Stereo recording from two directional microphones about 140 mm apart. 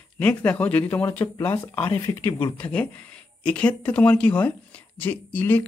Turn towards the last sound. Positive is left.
turn(degrees=10)  # may be behind; listen again after turning